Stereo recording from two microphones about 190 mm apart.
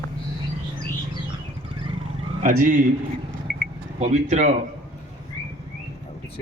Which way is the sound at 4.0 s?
35° right (ahead or behind).